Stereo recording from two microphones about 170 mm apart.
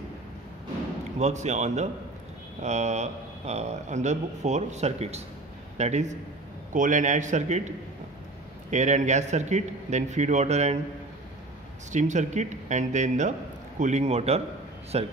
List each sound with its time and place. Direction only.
1.2 s speech: 45° right (ahead or behind)
8.6 s speech: 45° right (ahead or behind)
11.9 s speech: 45° right (ahead or behind)